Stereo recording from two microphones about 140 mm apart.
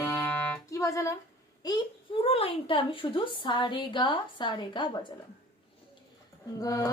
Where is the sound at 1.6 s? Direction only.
30° left (ahead or behind).